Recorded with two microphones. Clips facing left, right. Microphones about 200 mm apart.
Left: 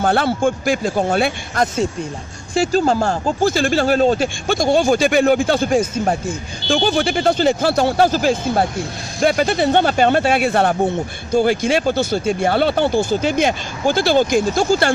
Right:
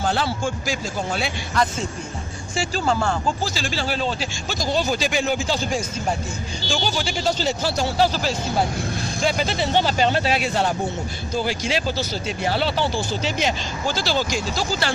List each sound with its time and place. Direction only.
0.0 s speech: 55° left (ahead or behind); by 3.3 s 40° left (ahead or behind)
3.4 s speech: 55° left (ahead or behind)